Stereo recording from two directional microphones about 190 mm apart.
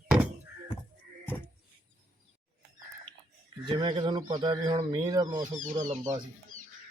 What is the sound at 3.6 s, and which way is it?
Speech, 25° right (ahead or behind).